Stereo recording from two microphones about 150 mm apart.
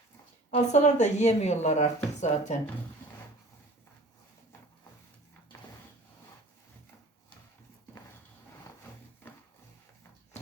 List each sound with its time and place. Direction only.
0.5 s speech: 50° left (ahead or behind)